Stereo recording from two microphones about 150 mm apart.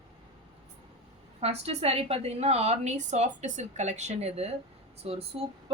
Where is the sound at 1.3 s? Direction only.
45° right (ahead or behind).